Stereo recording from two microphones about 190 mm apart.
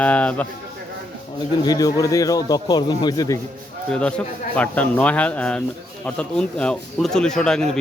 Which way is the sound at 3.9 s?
5° left (ahead or behind).